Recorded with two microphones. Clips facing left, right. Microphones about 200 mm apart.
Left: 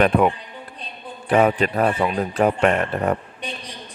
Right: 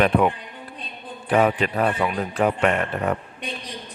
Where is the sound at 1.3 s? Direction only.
40° left (ahead or behind).